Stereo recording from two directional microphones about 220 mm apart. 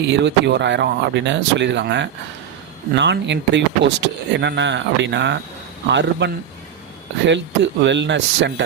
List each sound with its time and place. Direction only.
0.1 s speech: 50° right (ahead or behind)